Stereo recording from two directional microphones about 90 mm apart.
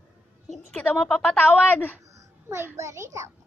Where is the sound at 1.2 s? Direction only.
20° left (ahead or behind).